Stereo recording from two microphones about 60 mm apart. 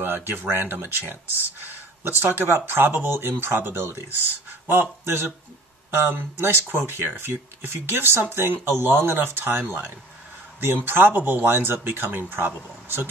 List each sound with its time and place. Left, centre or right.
0.0 s speech: right